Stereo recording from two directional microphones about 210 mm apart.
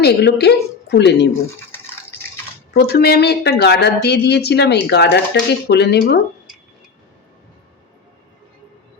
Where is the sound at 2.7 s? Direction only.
50° left (ahead or behind).